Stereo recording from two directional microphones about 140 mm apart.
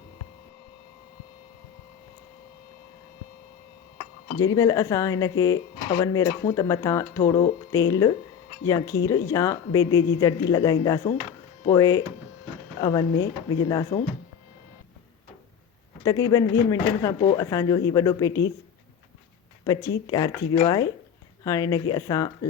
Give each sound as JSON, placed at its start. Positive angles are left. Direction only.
{"t": 4.4, "sound": "a woman's voice", "side_deg": 25}
{"t": 16.0, "sound": "a woman's voice", "side_deg": 25}
{"t": 19.6, "sound": "a woman's voice", "side_deg": 25}